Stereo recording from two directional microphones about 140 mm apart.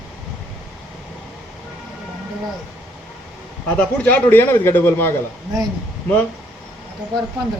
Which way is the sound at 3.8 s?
10° left (ahead or behind).